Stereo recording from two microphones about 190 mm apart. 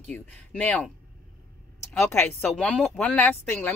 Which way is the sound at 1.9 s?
10° left (ahead or behind).